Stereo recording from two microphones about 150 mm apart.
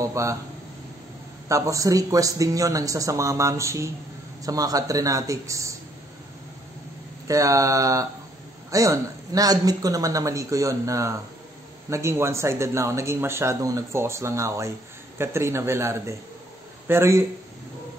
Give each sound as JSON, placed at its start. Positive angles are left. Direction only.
{"t": 0.0, "sound": "a sound", "side_deg": -20}
{"t": 1.5, "sound": "speech", "side_deg": -20}
{"t": 7.2, "sound": "a man's voice", "side_deg": -20}